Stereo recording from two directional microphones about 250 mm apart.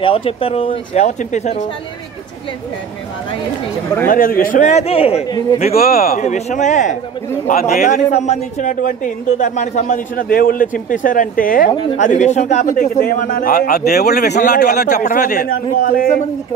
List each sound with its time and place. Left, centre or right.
0.0 s speech: left
4.1 s speech: left
5.6 s a man's voice: left